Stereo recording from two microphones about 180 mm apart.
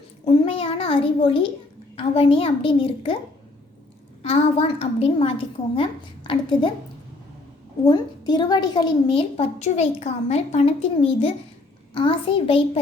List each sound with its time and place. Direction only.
0.3 s a child's voice: 35° left (ahead or behind)
4.2 s a woman's voice: 35° left (ahead or behind)
7.9 s a woman's voice: 25° left (ahead or behind)